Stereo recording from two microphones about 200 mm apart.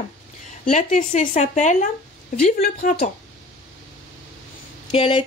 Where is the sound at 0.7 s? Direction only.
40° left (ahead or behind).